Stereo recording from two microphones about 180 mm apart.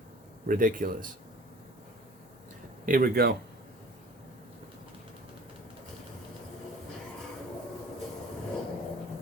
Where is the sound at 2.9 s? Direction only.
55° right (ahead or behind).